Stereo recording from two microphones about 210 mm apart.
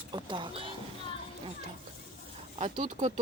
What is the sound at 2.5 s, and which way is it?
Speech, 35° right (ahead or behind).